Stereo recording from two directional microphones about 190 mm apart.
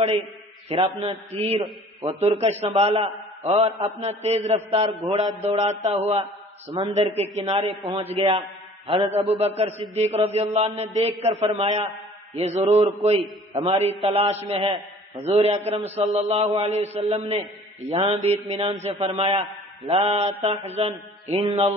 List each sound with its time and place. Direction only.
0.7 s a man's voice: 30° right (ahead or behind)
18.5 s a man's voice: 20° right (ahead or behind)